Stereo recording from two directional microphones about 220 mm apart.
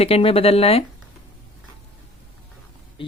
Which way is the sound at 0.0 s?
25° left (ahead or behind).